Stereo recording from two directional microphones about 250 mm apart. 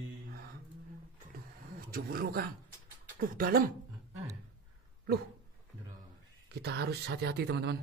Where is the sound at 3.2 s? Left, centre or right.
Right.